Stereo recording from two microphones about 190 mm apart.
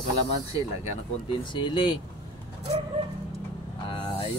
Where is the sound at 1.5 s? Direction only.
25° left (ahead or behind).